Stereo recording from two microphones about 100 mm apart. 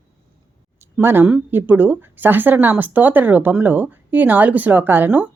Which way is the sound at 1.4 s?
20° right (ahead or behind).